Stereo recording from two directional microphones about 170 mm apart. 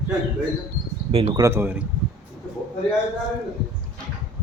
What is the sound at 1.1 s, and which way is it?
Speech, 35° right (ahead or behind).